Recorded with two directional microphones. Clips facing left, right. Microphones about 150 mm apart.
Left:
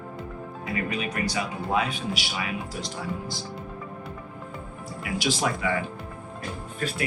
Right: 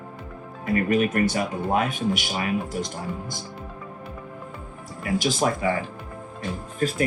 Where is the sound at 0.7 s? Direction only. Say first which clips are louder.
Right 9 dB; 45° right (ahead or behind).